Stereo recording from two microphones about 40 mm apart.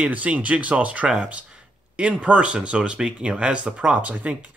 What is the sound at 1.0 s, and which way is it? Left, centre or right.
Speech, right.